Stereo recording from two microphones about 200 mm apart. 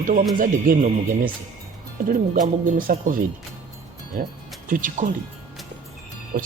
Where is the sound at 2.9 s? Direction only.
45° right (ahead or behind).